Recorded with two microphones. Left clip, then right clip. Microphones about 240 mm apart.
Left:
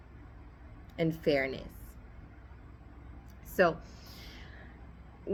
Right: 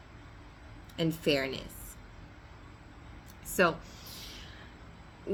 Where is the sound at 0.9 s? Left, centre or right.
Centre.